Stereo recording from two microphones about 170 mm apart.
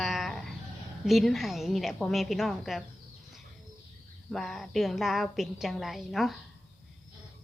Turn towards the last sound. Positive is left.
turn(degrees=0)  # may be behind; listen again after turning